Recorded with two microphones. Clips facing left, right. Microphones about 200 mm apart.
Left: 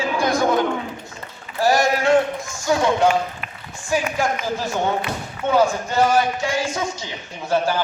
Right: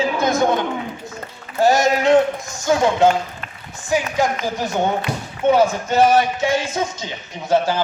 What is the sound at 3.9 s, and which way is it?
Speech, 20° right (ahead or behind).